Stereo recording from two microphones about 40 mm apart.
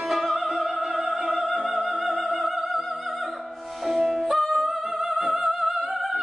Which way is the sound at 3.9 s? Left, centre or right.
Centre.